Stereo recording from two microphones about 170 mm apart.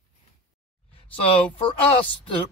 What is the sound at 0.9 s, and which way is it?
A woman's voice, 30° left (ahead or behind).